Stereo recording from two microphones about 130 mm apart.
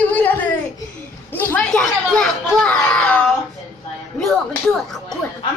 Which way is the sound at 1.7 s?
5° left (ahead or behind).